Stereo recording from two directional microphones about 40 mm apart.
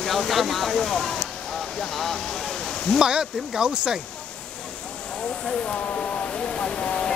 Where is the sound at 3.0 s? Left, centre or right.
Centre.